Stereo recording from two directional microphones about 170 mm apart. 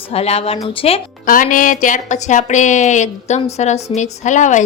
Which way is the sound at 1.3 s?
50° left (ahead or behind).